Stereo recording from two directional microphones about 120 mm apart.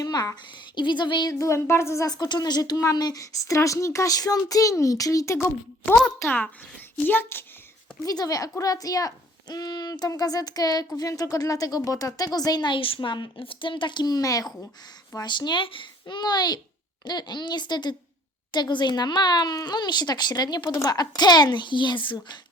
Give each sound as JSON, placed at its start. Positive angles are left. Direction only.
{"t": 0.0, "sound": "a woman's voice", "side_deg": 35}
{"t": 6.1, "sound": "a child's voice", "side_deg": 15}
{"t": 8.0, "sound": "speech", "side_deg": 30}